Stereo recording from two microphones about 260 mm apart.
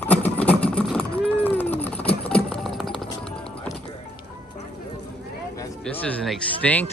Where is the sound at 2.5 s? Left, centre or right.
Centre.